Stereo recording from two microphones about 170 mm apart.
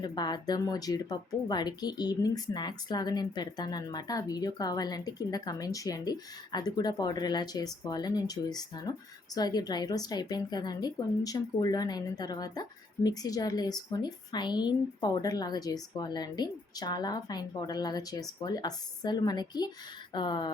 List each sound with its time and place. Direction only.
0.0 s speech: 25° left (ahead or behind)